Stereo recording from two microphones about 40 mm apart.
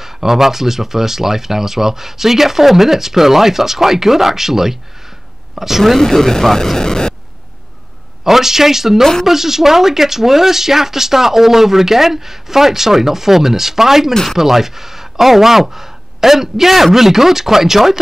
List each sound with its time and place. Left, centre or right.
0.0 s speech: centre
5.9 s speech: centre
8.2 s speech: centre